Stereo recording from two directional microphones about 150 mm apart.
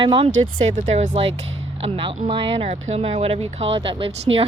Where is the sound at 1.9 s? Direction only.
35° right (ahead or behind).